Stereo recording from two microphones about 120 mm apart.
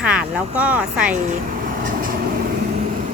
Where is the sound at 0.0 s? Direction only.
10° right (ahead or behind).